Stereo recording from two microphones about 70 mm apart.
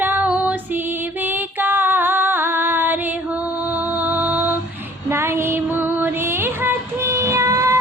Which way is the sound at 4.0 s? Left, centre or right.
Right.